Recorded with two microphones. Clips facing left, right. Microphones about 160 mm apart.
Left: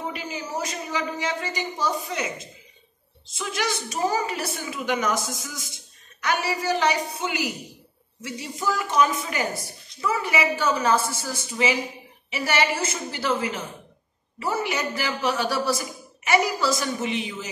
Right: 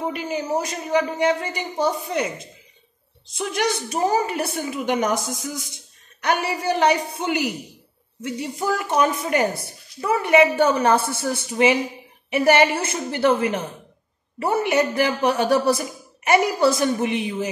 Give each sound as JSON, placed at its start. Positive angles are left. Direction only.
{"t": 0.1, "sound": "a man's voice", "side_deg": -55}
{"t": 3.3, "sound": "a man's voice", "side_deg": -60}